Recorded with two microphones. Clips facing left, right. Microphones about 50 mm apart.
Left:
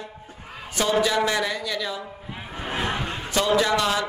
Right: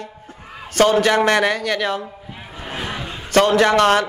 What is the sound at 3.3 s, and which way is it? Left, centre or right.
Speech, right.